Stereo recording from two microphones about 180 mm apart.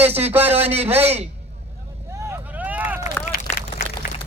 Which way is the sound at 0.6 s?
35° right (ahead or behind).